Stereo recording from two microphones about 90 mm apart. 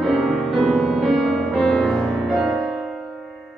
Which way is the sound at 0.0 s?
5° left (ahead or behind).